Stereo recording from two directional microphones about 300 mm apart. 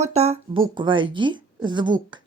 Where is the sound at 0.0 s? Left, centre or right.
Right.